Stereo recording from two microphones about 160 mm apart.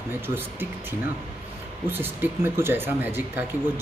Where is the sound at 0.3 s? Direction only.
15° right (ahead or behind).